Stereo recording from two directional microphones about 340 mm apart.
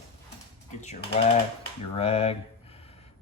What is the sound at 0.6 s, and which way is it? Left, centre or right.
Speech, left.